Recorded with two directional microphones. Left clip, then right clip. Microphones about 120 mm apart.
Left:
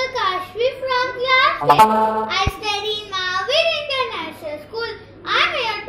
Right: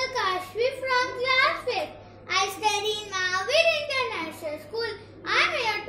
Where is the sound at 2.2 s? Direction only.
35° right (ahead or behind).